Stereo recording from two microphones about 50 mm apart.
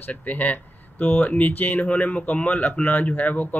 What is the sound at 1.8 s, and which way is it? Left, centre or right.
Speech, left.